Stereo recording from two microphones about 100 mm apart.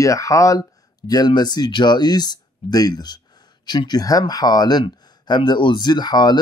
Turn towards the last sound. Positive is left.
turn(degrees=45)  # may be behind; listen again after turning